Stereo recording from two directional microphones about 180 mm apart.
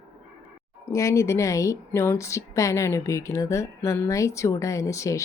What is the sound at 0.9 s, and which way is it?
A woman's voice, 15° left (ahead or behind).